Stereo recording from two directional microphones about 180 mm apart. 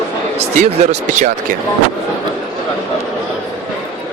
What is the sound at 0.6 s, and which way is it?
Speech, 40° right (ahead or behind).